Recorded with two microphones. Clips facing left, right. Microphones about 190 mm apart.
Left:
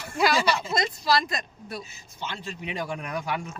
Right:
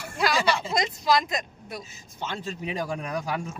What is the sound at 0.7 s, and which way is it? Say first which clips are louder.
Speech: right 1 dB; 15° right (ahead or behind).